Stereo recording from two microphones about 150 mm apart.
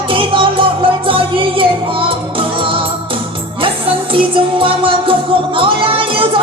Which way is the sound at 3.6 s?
35° right (ahead or behind).